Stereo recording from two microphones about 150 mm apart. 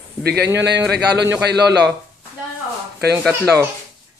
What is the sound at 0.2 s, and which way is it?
A man's voice, 90° right.